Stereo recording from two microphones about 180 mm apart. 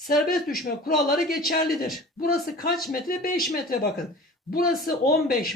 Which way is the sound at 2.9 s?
55° left (ahead or behind).